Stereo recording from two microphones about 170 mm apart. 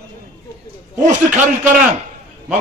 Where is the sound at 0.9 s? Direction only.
10° right (ahead or behind).